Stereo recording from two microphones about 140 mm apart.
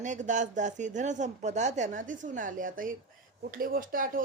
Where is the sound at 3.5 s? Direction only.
90° right.